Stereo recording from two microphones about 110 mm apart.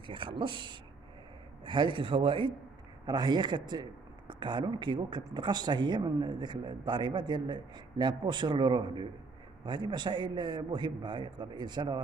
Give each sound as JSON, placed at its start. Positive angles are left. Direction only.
{"t": 0.0, "sound": "speech", "side_deg": -50}
{"t": 3.1, "sound": "speech", "side_deg": -40}